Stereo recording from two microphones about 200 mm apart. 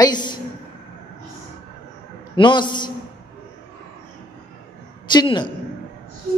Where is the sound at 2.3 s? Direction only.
25° left (ahead or behind).